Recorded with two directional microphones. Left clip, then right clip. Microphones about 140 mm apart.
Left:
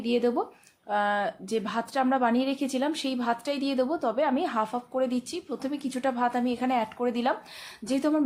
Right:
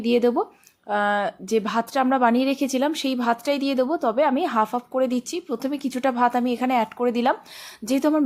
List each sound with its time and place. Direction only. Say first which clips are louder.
0.0 s a woman's voice: right 6 dB; 35° right (ahead or behind)